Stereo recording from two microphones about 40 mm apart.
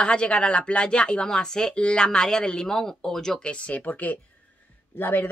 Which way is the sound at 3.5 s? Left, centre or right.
Left.